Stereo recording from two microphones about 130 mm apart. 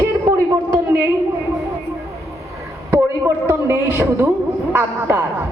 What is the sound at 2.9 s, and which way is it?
A man's voice, 20° right (ahead or behind).